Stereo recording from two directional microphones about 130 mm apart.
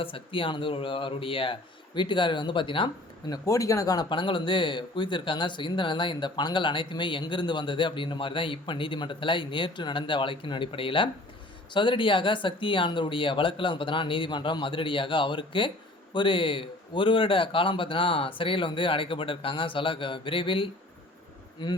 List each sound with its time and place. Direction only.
0.0 s speech: 40° left (ahead or behind)